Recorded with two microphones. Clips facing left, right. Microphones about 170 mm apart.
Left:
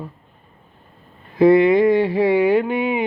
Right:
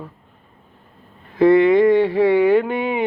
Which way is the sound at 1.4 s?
10° left (ahead or behind).